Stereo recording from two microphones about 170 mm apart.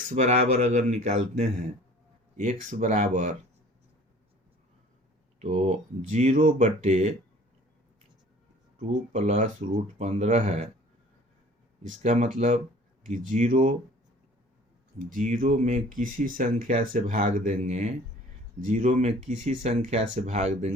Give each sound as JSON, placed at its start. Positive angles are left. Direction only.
{"t": 0.1, "sound": "speech", "side_deg": -40}
{"t": 6.1, "sound": "speech", "side_deg": -45}
{"t": 8.8, "sound": "speech", "side_deg": -50}
{"t": 11.8, "sound": "speech", "side_deg": -50}
{"t": 15.1, "sound": "speech", "side_deg": -50}